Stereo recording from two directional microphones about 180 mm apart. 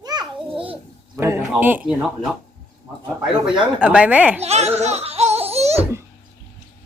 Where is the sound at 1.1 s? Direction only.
15° right (ahead or behind).